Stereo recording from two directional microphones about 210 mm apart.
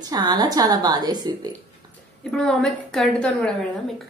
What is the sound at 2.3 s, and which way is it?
A woman's voice, 5° left (ahead or behind).